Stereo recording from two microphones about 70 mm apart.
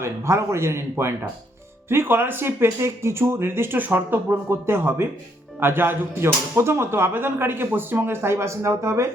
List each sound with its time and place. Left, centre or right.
0.0 s speech: right